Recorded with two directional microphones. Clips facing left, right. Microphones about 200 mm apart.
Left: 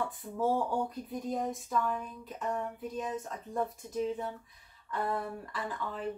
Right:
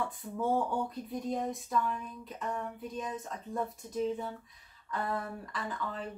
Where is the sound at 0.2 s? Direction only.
Centre (ahead or behind).